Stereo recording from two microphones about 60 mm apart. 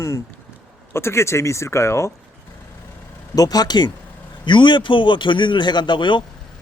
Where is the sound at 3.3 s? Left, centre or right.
Left.